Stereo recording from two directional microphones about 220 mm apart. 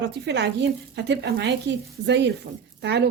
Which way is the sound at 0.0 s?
50° right (ahead or behind).